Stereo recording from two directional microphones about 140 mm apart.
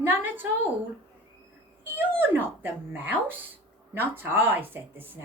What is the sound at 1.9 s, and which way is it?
A woman's voice, 15° right (ahead or behind).